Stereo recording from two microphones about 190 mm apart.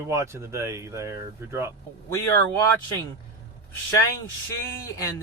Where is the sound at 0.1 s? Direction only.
15° right (ahead or behind).